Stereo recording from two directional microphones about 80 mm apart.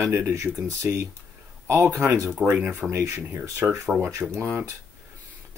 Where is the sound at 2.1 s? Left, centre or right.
Right.